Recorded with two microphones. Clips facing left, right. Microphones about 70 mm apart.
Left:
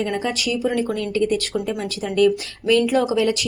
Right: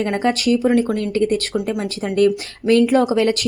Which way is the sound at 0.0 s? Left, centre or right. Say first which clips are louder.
Right 5 dB; right.